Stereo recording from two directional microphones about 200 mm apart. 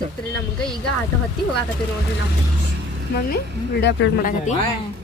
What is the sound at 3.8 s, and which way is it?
Speech, 60° left (ahead or behind).